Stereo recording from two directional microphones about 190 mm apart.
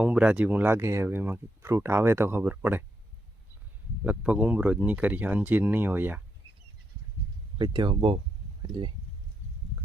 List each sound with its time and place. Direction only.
0.0 s speech: 5° right (ahead or behind)
4.0 s speech: 5° right (ahead or behind)
7.6 s speech: 25° right (ahead or behind)